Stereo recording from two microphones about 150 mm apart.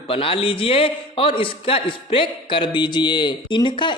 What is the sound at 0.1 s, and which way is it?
A man's voice, 40° left (ahead or behind).